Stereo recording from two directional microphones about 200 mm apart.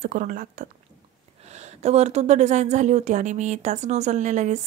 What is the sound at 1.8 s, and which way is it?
Speech, 35° right (ahead or behind).